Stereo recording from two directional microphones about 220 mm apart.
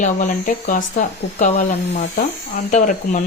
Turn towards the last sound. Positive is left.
turn(degrees=35)  # may be behind; listen again after turning